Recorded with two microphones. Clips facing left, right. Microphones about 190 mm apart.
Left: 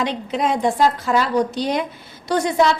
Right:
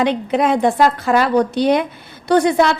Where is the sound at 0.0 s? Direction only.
60° right (ahead or behind).